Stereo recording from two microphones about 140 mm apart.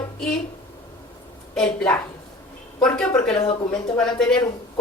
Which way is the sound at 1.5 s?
5° left (ahead or behind).